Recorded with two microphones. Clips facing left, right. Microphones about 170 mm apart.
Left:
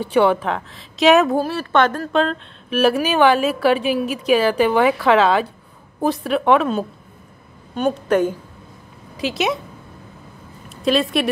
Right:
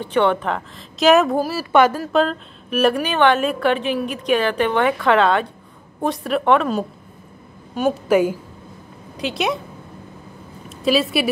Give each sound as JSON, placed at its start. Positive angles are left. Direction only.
{"t": 0.0, "sound": "a woman's voice", "side_deg": 10}
{"t": 10.8, "sound": "a woman's voice", "side_deg": -5}